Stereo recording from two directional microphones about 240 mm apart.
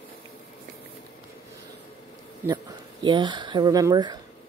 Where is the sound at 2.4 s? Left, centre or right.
Centre.